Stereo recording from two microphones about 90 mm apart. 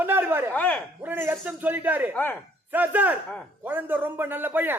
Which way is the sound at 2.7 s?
20° right (ahead or behind).